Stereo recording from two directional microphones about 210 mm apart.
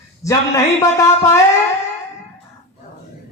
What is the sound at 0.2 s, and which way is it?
A man's voice, 15° left (ahead or behind).